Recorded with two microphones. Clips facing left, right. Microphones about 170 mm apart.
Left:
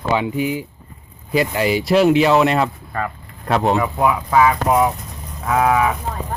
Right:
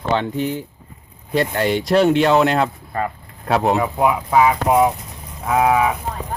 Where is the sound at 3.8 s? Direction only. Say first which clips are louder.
Even; 20° right (ahead or behind).